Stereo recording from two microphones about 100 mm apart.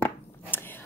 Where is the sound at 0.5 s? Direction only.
20° left (ahead or behind).